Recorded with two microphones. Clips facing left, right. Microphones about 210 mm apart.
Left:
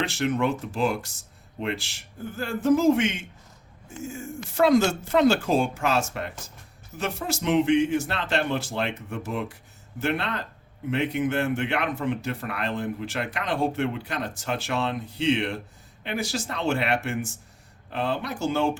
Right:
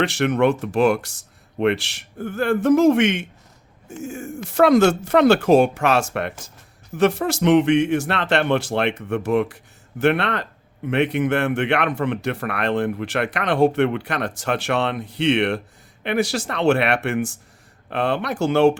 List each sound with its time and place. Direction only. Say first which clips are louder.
0.0 s speech: right 6 dB; 70° right (ahead or behind)